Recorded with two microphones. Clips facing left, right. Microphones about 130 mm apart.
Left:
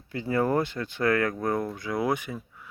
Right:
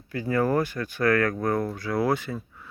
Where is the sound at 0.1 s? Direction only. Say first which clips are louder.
Right 1 dB; 25° left (ahead or behind).